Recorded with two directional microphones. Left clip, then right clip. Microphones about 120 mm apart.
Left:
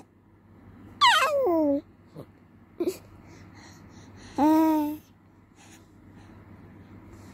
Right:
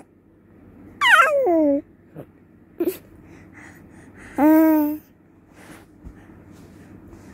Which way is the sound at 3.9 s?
35° left (ahead or behind).